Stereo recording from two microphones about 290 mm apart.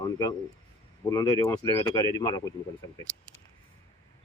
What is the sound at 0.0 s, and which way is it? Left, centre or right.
Speech, centre.